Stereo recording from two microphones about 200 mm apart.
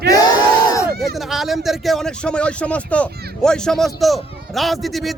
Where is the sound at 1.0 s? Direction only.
Centre (ahead or behind).